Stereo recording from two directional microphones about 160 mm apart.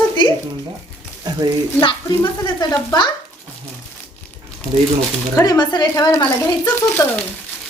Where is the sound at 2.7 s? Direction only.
20° left (ahead or behind).